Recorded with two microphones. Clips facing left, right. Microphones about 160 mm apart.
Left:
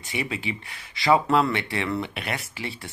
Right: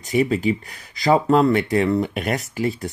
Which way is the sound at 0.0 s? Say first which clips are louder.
Right 11 dB; 40° right (ahead or behind).